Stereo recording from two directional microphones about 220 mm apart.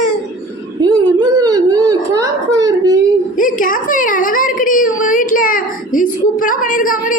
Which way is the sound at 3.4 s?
35° left (ahead or behind).